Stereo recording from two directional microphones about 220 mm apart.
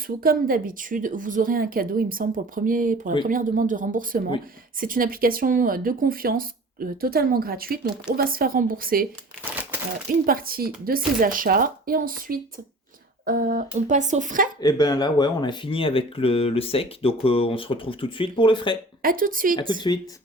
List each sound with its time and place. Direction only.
0.2 s speech: 40° right (ahead or behind)
10.2 s speech: 40° right (ahead or behind)
14.6 s speech: 15° left (ahead or behind)
19.0 s speech: 40° right (ahead or behind)
19.9 s speech: 20° left (ahead or behind)